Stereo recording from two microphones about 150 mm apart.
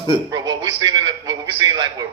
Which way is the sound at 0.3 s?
25° right (ahead or behind).